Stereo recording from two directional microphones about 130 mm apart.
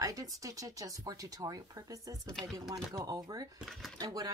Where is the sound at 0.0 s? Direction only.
25° right (ahead or behind).